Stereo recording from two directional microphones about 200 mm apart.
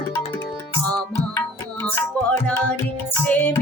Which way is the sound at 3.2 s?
10° left (ahead or behind).